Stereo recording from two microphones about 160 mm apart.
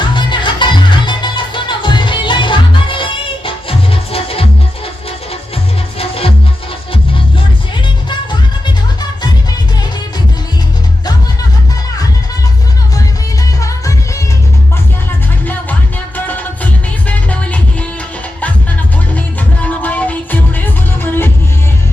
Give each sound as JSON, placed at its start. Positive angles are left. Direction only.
{"t": 0.0, "sound": "music", "side_deg": 30}
{"t": 6.0, "sound": "music", "side_deg": 35}
{"t": 8.1, "sound": "music", "side_deg": 30}
{"t": 13.6, "sound": "music", "side_deg": 20}
{"t": 16.1, "sound": "music", "side_deg": 10}
{"t": 19.6, "sound": "music", "side_deg": 10}